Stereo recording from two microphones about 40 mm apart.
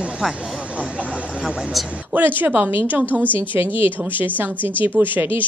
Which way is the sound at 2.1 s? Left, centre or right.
Right.